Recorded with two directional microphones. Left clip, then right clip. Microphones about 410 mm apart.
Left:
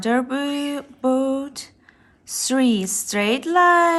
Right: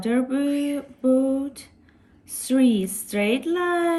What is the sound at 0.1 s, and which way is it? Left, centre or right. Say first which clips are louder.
Speech: left 2 dB; centre.